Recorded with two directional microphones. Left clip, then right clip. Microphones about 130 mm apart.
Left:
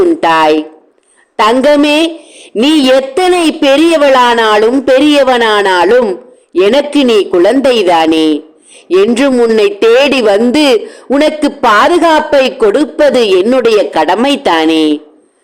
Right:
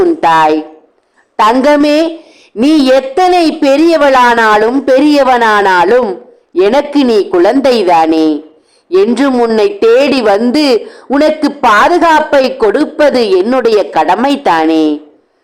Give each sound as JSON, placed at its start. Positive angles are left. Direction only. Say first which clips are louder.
{"t": 0.3, "sound": "speech", "louder": "right 1 dB", "side_deg": 15}
{"t": 1.5, "sound": "speech", "louder": "even", "side_deg": 5}
{"t": 6.0, "sound": "a sound", "louder": "left 2 dB", "side_deg": 5}
{"t": 6.6, "sound": "a man's voice", "louder": "left 1 dB", "side_deg": 15}
{"t": 9.6, "sound": "speech", "louder": "right 1 dB", "side_deg": 15}